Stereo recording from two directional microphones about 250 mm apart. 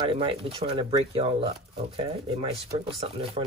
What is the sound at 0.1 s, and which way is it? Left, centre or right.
Speech, right.